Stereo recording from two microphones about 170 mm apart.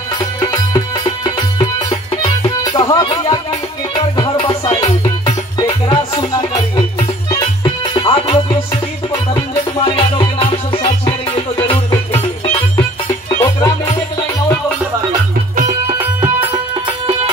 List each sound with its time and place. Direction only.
0.4 s music: 20° left (ahead or behind)
5.0 s music: 25° left (ahead or behind)
7.3 s music: 30° left (ahead or behind)
13.4 s music: 20° left (ahead or behind)
16.0 s music: 10° right (ahead or behind)
16.8 s music: 30° right (ahead or behind)